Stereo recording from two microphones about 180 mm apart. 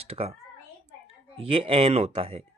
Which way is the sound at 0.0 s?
35° right (ahead or behind).